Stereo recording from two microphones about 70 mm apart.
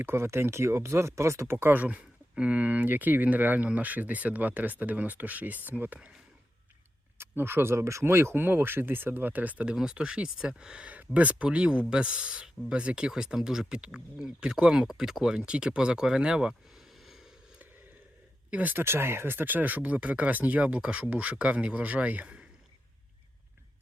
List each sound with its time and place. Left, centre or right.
0.0 s speech: right
7.2 s speech: right; by 17.3 s centre
18.5 s speech: right